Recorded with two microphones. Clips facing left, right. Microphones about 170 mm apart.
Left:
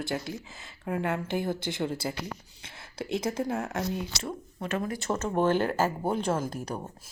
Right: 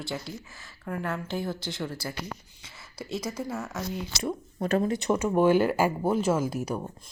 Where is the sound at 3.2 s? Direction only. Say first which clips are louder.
Left 4 dB; 55° left (ahead or behind).